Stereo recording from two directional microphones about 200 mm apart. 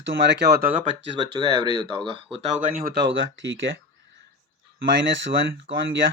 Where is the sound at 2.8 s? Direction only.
60° right (ahead or behind).